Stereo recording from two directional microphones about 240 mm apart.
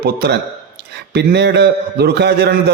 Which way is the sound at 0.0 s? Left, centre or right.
Right.